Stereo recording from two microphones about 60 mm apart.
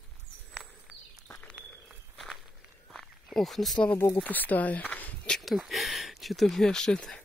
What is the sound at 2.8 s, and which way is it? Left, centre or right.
Cricket, centre.